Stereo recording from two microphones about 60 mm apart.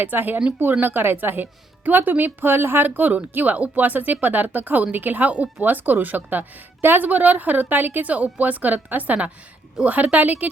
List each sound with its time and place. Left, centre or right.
0.0 s a woman's voice: right